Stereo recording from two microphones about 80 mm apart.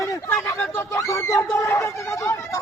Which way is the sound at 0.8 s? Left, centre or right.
Left.